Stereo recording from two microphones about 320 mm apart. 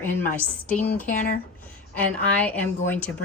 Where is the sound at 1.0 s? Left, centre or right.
Left.